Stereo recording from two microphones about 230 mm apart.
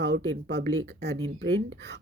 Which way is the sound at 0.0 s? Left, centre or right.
Right.